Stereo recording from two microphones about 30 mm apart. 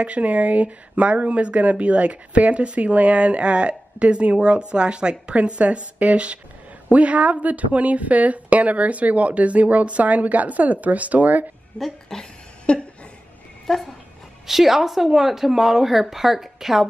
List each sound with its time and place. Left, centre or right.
0.0 s speech: right
5.3 s a woman's voice: right
11.7 s speech: left
12.1 s speech: centre
12.7 s a sound: left
13.7 s speech: centre
14.4 s speech: centre